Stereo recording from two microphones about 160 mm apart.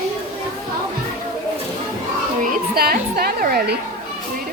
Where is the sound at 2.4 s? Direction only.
65° right (ahead or behind).